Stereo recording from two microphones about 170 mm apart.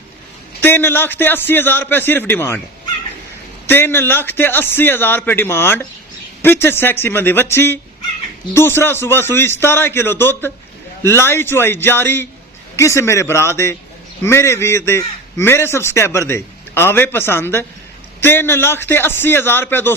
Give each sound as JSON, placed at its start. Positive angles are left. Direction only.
{"t": 0.6, "sound": "a man's voice", "side_deg": 15}
{"t": 3.7, "sound": "a man's voice", "side_deg": 15}